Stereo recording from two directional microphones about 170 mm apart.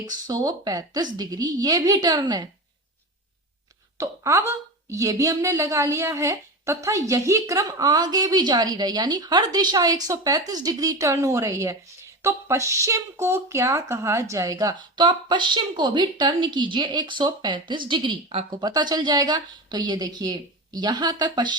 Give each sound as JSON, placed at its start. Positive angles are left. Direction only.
{"t": 0.0, "sound": "speech", "side_deg": -20}
{"t": 3.9, "sound": "speech", "side_deg": -15}